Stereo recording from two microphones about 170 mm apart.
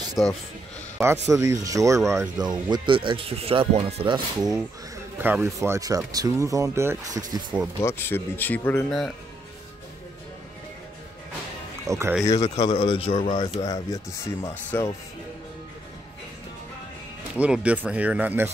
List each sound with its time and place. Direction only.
0.2 s speech: 15° left (ahead or behind)
0.9 s speech: 15° right (ahead or behind)
5.2 s speech: 15° right (ahead or behind)
7.8 s speech: 15° left (ahead or behind)
11.8 s speech: 15° right (ahead or behind)
12.5 s speech: 35° left (ahead or behind)
13.7 s speech: 20° left (ahead or behind)
14.5 s speech: 10° left (ahead or behind)
17.4 s speech: 10° right (ahead or behind)